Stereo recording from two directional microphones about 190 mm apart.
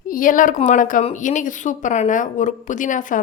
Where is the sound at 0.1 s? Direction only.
45° left (ahead or behind).